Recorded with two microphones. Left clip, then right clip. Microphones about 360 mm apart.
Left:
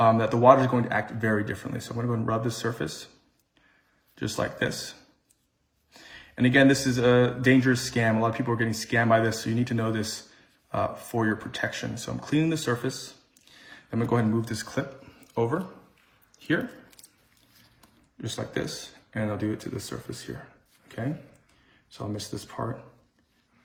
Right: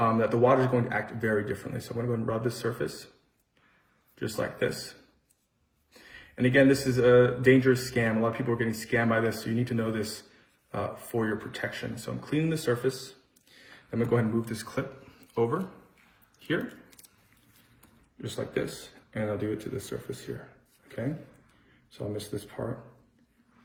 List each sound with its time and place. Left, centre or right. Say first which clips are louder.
0.0 s speech: left 5 dB; left
4.1 s speech: left 2 dB; left
5.9 s speech: left 3 dB; left
18.2 s speech: even; left
20.8 s a sound: even; left
21.9 s speech: even; left